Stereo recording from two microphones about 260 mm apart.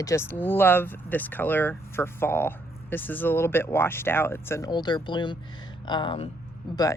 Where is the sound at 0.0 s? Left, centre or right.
Centre.